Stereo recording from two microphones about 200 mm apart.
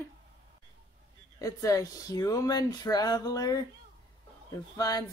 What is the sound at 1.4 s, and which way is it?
Speech, 15° left (ahead or behind).